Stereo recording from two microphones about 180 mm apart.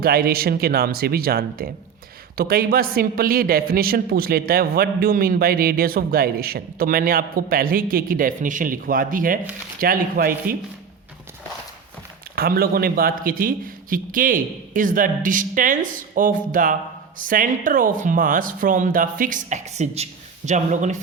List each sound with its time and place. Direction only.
0.0 s a man's voice: 55° right (ahead or behind)
12.4 s a man's voice: 55° right (ahead or behind); by 20.9 s 40° right (ahead or behind)